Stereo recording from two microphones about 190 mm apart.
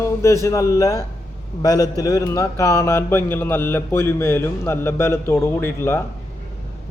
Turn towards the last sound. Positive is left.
turn(degrees=15)  # may be behind; listen again after turning